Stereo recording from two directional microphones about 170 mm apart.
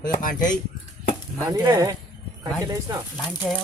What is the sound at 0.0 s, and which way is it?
Speech, 55° left (ahead or behind).